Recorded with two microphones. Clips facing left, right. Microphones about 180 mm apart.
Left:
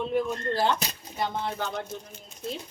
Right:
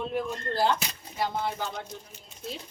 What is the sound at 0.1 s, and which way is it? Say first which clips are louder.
Speech: left 4 dB; centre (ahead or behind).